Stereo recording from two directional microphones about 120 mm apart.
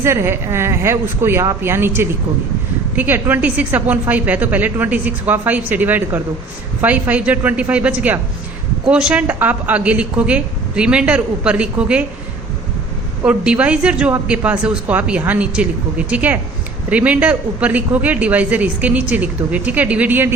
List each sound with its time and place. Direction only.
0.0 s speech: 20° right (ahead or behind)
13.2 s speech: 10° right (ahead or behind)